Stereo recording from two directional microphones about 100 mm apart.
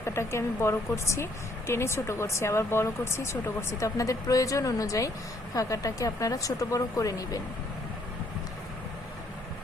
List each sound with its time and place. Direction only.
0.0 s a woman's voice: 25° left (ahead or behind)